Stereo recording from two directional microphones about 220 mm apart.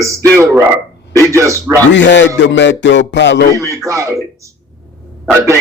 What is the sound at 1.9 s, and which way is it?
Speech, 55° left (ahead or behind).